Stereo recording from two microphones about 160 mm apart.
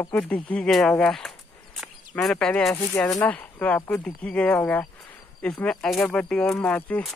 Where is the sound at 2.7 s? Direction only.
15° left (ahead or behind).